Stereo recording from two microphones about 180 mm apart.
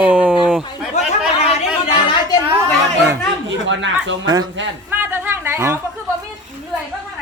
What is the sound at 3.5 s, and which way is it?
Speech, 90° right.